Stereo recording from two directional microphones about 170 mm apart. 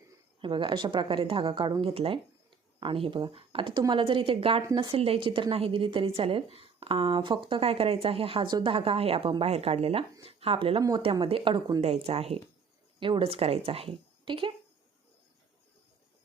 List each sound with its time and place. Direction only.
0.4 s a woman's voice: 30° right (ahead or behind)